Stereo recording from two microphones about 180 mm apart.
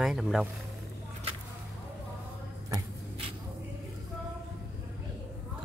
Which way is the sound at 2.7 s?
30° right (ahead or behind).